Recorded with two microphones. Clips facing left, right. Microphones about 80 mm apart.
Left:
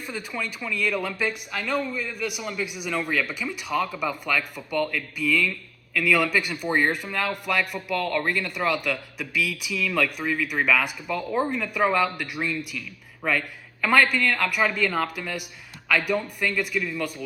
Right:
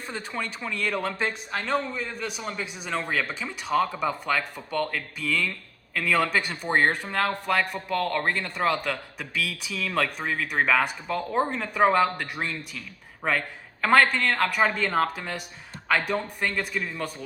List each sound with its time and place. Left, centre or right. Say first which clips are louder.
0.0 s speech: left 1 dB; right